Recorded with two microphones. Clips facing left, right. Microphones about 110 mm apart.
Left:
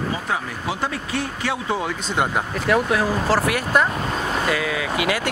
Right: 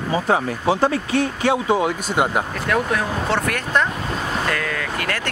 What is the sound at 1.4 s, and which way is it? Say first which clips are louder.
Speech: right 6 dB; 20° right (ahead or behind).